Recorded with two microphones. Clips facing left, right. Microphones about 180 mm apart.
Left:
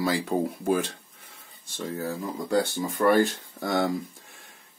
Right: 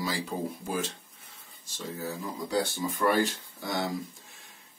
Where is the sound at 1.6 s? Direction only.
55° left (ahead or behind).